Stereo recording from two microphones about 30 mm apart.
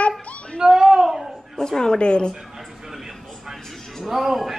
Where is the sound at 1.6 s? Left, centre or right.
Left.